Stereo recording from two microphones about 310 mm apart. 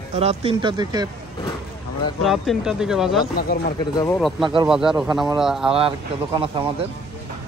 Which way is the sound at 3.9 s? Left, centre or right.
Centre.